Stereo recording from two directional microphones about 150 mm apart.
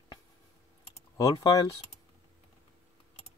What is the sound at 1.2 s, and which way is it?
Speech, 20° left (ahead or behind).